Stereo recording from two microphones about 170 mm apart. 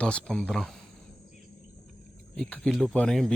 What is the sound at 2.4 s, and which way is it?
Speech, 5° left (ahead or behind).